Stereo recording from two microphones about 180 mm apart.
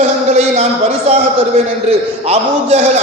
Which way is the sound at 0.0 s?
40° right (ahead or behind).